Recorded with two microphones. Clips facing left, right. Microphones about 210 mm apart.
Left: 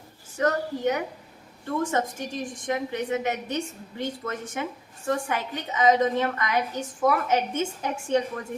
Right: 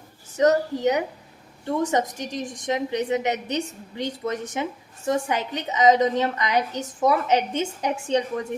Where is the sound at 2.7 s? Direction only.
20° right (ahead or behind).